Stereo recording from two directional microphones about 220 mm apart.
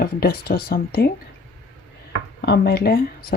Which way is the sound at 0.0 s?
45° left (ahead or behind).